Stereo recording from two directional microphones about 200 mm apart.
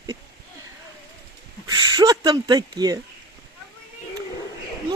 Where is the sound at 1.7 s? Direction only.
20° right (ahead or behind).